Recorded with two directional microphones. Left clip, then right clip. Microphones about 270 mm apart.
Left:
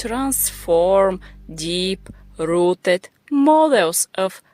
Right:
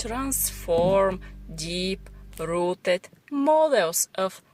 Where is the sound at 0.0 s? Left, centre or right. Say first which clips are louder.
Left 7 dB; left.